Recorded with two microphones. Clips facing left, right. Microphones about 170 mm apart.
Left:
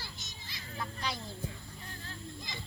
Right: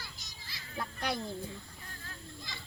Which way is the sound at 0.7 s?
55° right (ahead or behind).